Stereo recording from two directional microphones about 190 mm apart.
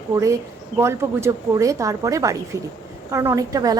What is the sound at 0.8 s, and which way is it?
A woman's voice, 15° right (ahead or behind).